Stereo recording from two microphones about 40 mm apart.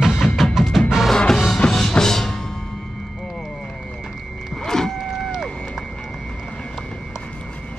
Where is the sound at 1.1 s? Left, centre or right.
Centre.